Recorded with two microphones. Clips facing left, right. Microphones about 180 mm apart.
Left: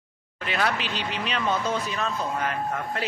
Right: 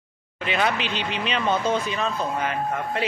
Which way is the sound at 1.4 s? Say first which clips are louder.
Right 3 dB; 25° right (ahead or behind).